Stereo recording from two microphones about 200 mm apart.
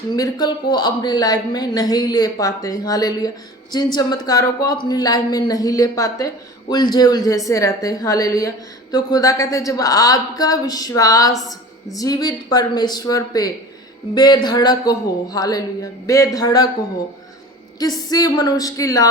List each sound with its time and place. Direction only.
0.2 s a woman's voice: 20° left (ahead or behind)
18.1 s speech: 20° left (ahead or behind)